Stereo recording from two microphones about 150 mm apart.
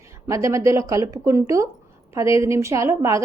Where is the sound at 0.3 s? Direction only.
20° right (ahead or behind).